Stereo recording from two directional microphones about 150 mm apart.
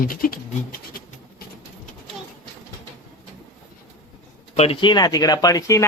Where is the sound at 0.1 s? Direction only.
70° left (ahead or behind).